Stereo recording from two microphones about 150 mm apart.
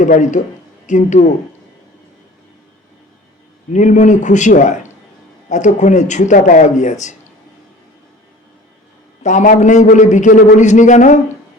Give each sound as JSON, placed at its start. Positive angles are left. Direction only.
{"t": 0.0, "sound": "speech", "side_deg": 55}
{"t": 3.7, "sound": "speech", "side_deg": 55}
{"t": 9.2, "sound": "speech", "side_deg": 55}